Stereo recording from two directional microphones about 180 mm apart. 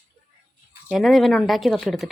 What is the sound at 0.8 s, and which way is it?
Speech, centre (ahead or behind).